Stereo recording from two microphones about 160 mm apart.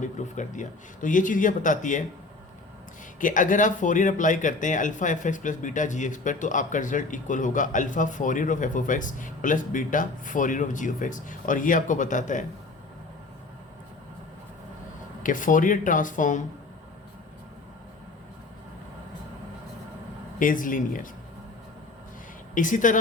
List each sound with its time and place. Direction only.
0.0 s speech: 50° left (ahead or behind)
3.2 s speech: 55° left (ahead or behind)
15.2 s speech: 55° left (ahead or behind)
20.4 s speech: 55° left (ahead or behind)
22.5 s speech: 55° left (ahead or behind)